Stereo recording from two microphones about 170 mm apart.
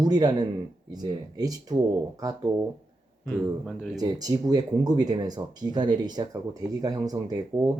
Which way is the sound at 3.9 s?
20° right (ahead or behind).